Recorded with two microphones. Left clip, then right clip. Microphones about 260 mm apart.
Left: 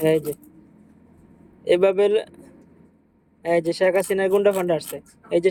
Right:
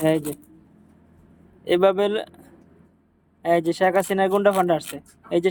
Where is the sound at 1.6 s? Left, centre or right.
Centre.